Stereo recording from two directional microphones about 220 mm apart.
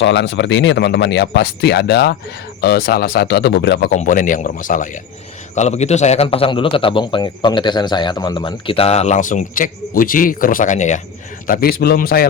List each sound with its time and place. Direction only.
0.0 s speech: 55° left (ahead or behind)
3.9 s a man's voice: 35° left (ahead or behind)